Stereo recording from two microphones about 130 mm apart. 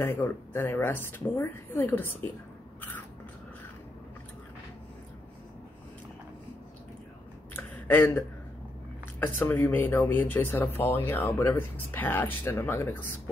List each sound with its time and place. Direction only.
0.0 s speech: 15° left (ahead or behind)
7.5 s a sound: 15° left (ahead or behind)
9.2 s speech: 15° left (ahead or behind)